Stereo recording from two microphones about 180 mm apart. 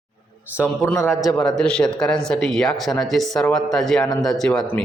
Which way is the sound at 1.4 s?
5° left (ahead or behind).